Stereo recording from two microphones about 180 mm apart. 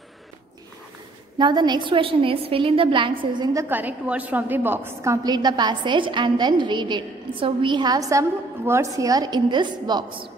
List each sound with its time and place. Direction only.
1.4 s a woman's voice: 25° right (ahead or behind)
3.6 s a woman's voice: 10° right (ahead or behind); by 10.3 s 30° right (ahead or behind)